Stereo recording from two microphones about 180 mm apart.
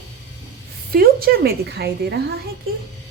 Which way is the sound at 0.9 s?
55° right (ahead or behind).